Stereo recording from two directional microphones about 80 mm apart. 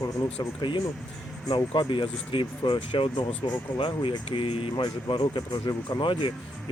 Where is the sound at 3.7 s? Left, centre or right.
Left.